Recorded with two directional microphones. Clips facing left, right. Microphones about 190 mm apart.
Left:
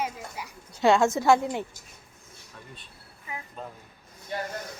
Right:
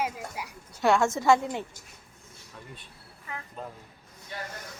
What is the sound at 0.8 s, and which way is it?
Speech, 15° left (ahead or behind).